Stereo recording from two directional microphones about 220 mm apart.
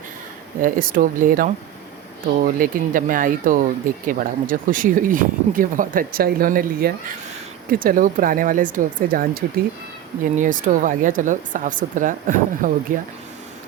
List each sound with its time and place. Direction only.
0.6 s speech: 40° right (ahead or behind)